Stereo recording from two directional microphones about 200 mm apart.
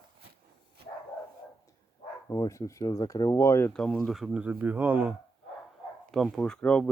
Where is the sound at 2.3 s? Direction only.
15° left (ahead or behind); by 5.1 s 10° right (ahead or behind).